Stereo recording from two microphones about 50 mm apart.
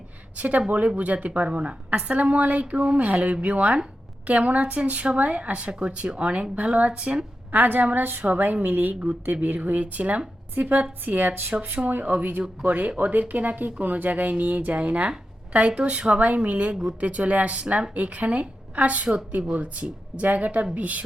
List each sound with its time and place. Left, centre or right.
0.3 s a woman's voice: right
7.5 s a woman's voice: right